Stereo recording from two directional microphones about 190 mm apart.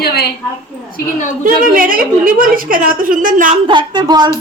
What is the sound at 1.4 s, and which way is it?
A woman's voice, 45° right (ahead or behind).